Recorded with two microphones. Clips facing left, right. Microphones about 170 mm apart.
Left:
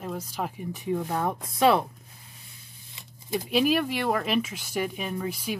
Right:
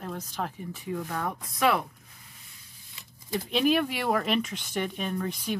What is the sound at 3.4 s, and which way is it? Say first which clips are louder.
Speech: left 1 dB; 5° left (ahead or behind).